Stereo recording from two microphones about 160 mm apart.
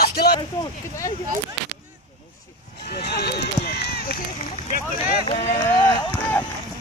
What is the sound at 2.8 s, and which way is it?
Run, 90° left.